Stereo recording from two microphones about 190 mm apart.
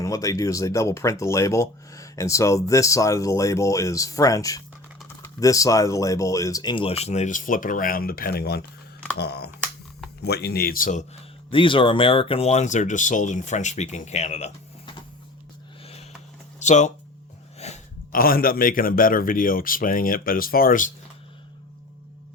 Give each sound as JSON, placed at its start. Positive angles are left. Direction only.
{"t": 0.0, "sound": "speech", "side_deg": 15}
{"t": 11.5, "sound": "speech", "side_deg": 25}
{"t": 15.8, "sound": "a sound", "side_deg": 30}
{"t": 16.6, "sound": "speech", "side_deg": 40}
{"t": 17.6, "sound": "a sound", "side_deg": 35}
{"t": 18.1, "sound": "speech", "side_deg": 50}